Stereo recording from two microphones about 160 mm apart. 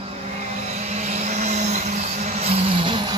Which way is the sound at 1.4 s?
45° right (ahead or behind).